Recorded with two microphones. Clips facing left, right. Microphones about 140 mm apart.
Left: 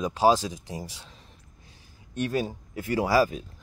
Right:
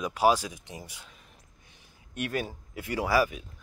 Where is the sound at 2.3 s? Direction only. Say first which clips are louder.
Left 4 dB; 35° left (ahead or behind).